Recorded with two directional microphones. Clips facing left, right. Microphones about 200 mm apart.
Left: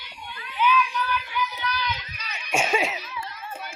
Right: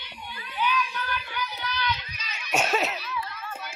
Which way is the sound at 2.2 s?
60° left (ahead or behind).